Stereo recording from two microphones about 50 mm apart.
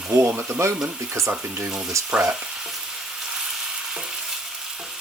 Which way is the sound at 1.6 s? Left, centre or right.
Right.